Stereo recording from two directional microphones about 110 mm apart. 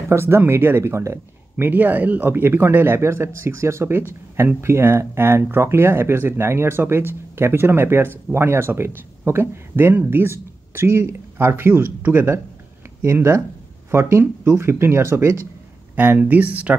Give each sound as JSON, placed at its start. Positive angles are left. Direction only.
{"t": 0.1, "sound": "speech", "side_deg": -25}